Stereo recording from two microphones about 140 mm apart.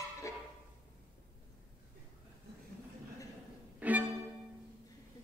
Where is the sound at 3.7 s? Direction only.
10° right (ahead or behind).